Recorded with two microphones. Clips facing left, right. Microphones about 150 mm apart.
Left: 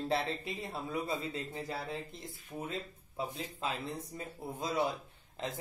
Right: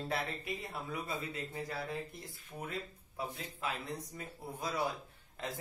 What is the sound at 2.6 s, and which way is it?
Speech, 20° left (ahead or behind).